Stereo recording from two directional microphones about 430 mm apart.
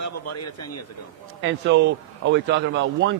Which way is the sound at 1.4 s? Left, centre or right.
Right.